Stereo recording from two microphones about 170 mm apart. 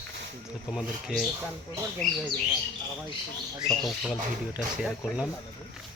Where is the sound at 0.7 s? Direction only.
Centre (ahead or behind).